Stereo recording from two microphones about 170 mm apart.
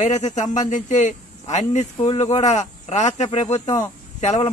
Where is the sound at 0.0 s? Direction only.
45° left (ahead or behind).